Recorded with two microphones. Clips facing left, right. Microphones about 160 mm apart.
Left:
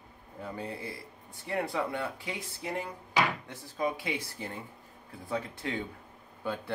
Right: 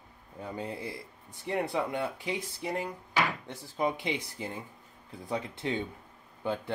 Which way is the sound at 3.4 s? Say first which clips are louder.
Right 2 dB; 25° right (ahead or behind).